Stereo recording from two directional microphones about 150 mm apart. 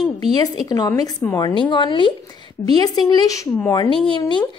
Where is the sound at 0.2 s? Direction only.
25° left (ahead or behind).